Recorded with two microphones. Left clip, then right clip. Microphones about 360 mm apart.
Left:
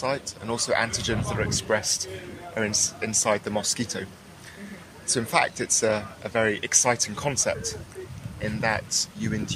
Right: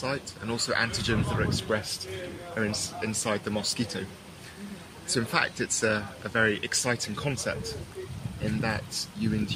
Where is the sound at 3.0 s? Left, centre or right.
Centre.